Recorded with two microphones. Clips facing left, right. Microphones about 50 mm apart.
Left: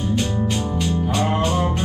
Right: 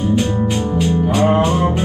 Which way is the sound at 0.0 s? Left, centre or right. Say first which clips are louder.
Right 5 dB; centre.